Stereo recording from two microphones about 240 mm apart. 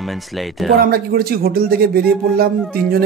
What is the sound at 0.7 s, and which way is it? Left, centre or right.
A man's voice, right.